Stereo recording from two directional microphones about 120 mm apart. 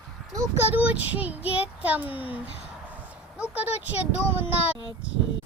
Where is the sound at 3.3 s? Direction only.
10° right (ahead or behind).